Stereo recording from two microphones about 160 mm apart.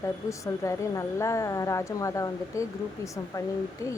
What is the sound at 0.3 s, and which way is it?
A woman's voice, 20° left (ahead or behind).